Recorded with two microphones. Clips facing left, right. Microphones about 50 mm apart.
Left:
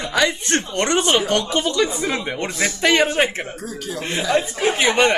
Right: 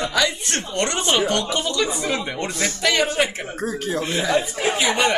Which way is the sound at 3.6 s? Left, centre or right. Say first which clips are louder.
Right 5 dB; right.